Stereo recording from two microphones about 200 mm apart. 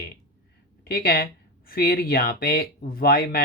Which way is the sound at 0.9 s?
50° left (ahead or behind).